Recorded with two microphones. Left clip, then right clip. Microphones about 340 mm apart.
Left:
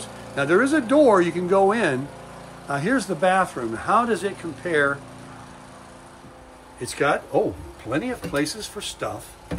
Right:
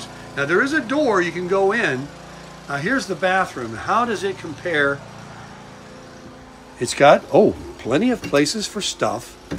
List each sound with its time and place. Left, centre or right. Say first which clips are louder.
0.0 s speech: right 1 dB; centre
6.8 s speech: right 9 dB; centre